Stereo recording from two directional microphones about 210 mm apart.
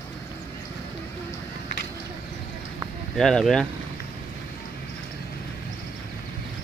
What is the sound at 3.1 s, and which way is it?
Speech, centre (ahead or behind).